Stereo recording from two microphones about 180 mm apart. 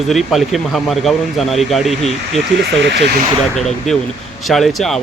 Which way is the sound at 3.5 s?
Centre (ahead or behind).